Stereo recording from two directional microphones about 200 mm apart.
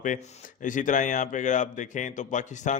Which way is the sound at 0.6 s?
40° left (ahead or behind).